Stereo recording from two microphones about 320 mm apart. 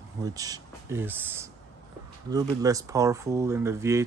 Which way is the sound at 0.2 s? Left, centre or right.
Centre.